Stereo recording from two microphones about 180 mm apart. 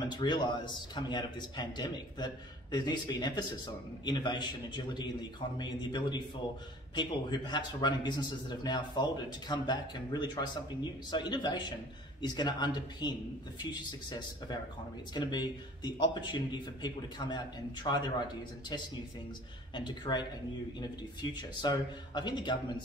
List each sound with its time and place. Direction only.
0.1 s a man's voice: 25° left (ahead or behind)
19.7 s a man's voice: 25° left (ahead or behind)